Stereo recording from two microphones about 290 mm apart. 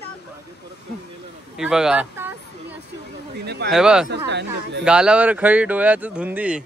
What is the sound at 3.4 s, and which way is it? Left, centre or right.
Speech, right.